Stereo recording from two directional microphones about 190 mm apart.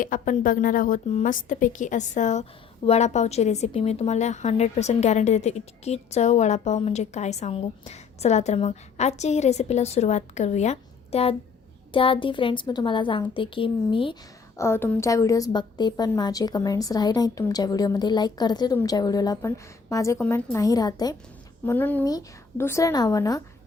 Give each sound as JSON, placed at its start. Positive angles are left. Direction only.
{"t": 0.0, "sound": "a woman's voice", "side_deg": 45}
{"t": 14.6, "sound": "a woman's voice", "side_deg": 10}